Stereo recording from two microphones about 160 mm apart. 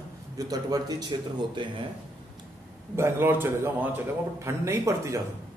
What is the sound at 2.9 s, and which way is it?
A man's voice, 15° right (ahead or behind).